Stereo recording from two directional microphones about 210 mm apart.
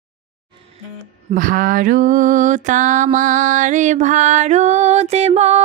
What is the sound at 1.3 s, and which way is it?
Mantra, 40° right (ahead or behind).